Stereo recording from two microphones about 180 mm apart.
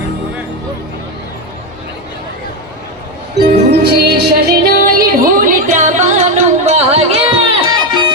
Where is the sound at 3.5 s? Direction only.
60° right (ahead or behind); by 7.4 s 35° right (ahead or behind).